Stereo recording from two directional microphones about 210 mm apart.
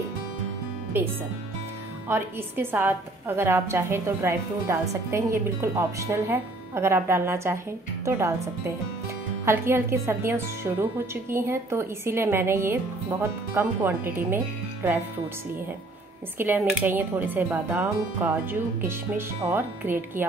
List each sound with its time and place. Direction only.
1.0 s a woman's voice: 10° right (ahead or behind)
16.3 s a woman's voice: 10° right (ahead or behind)